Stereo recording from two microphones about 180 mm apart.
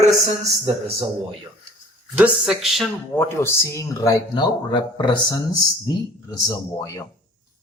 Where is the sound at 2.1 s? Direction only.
5° right (ahead or behind).